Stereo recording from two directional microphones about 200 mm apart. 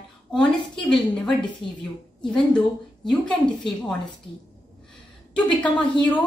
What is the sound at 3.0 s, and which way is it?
Speech, 5° left (ahead or behind).